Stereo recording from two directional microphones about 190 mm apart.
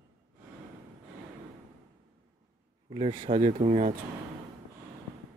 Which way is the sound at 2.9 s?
30° right (ahead or behind).